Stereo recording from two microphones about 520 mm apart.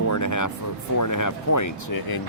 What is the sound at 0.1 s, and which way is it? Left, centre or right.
Music, left.